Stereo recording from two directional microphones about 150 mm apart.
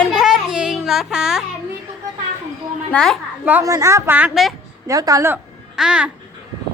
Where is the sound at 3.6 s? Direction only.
20° right (ahead or behind).